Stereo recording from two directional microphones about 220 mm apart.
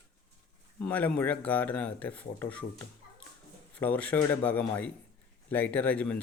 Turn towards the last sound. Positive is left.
turn(degrees=5)  # may be behind; listen again after turning